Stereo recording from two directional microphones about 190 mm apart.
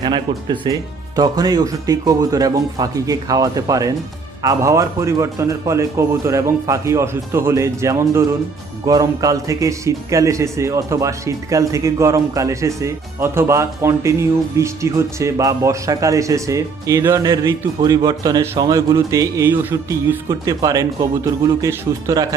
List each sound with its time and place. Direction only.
0.0 s a man's voice: 25° right (ahead or behind)